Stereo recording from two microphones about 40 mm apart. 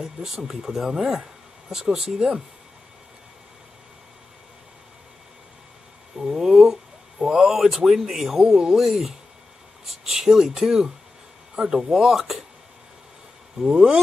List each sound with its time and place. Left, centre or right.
0.0 s speech: centre
6.2 s speech: centre
13.6 s speech: centre